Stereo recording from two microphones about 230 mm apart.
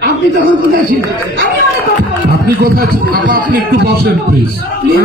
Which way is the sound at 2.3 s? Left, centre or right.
Right.